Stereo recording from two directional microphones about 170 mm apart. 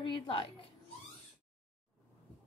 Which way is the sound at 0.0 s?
30° left (ahead or behind).